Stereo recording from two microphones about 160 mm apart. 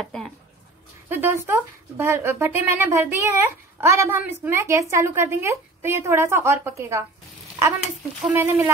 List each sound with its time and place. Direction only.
0.0 s speech: 5° left (ahead or behind)
1.0 s speech: 15° right (ahead or behind)
8.3 s speech: 15° right (ahead or behind)